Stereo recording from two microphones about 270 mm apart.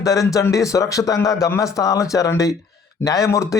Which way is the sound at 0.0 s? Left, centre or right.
Centre.